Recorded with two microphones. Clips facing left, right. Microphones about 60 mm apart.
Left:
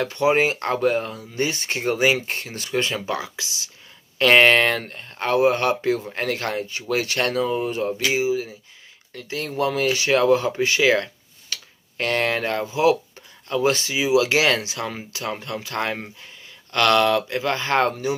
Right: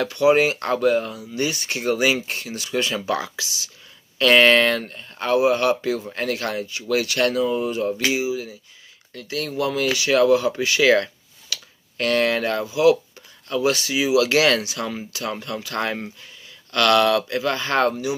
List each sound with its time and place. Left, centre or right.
0.0 s speech: left
2.9 s speech: left
4.8 s speech: left
10.8 s speech: centre
11.4 s a sound: left
12.6 s speech: left